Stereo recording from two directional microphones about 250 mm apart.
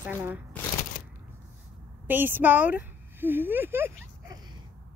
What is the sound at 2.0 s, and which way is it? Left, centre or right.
A woman's voice, centre.